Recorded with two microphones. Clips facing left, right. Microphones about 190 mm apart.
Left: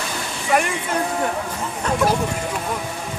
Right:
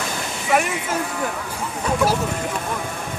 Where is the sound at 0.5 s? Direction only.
Centre (ahead or behind).